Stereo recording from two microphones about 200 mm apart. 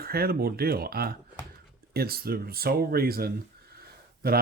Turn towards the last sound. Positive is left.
turn(degrees=-50)  # may be behind; listen again after turning